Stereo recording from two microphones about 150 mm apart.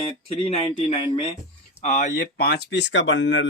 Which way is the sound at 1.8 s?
55° left (ahead or behind).